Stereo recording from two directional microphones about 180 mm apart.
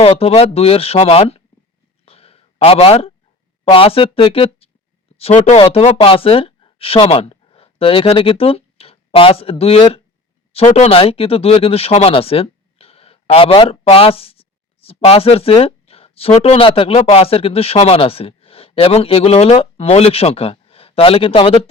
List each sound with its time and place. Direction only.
0.0 s speech: 30° left (ahead or behind)
2.0 s a sound: 35° left (ahead or behind)
3.6 s speech: 30° left (ahead or behind)